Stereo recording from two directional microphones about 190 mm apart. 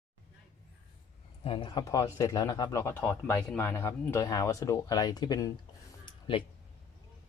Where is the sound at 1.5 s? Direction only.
25° left (ahead or behind).